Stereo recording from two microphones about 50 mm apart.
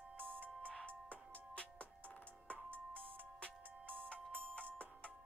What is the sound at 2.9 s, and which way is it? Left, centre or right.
Music, left.